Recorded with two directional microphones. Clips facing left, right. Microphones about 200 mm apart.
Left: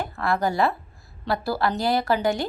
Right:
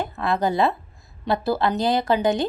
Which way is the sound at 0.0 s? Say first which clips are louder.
Right 1 dB; 20° right (ahead or behind).